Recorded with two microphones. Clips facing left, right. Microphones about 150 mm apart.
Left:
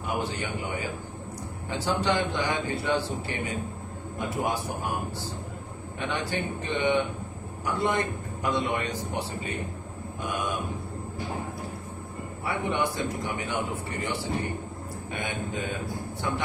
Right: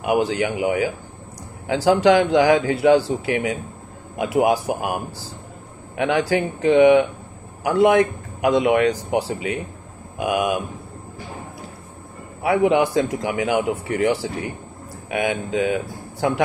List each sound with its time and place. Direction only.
0.0 s a man's voice: 90° right
5.9 s a man's voice: 90° right
12.4 s a man's voice: 90° right